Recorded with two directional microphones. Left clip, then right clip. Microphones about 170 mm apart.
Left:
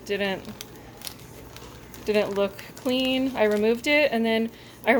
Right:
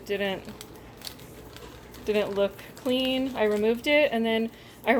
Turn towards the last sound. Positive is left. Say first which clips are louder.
# left 2 dB
turn(degrees=5)  # may be behind; listen again after turning